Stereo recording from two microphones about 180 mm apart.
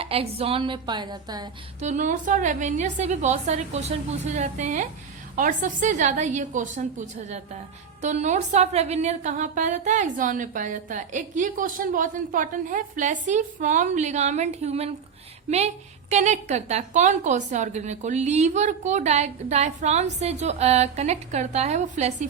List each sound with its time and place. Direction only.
0.0 s a woman's voice: 35° right (ahead or behind)
1.8 s a woman's voice: 40° right (ahead or behind)